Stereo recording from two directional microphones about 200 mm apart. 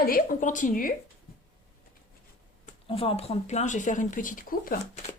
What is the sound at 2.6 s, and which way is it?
Speech, 30° left (ahead or behind).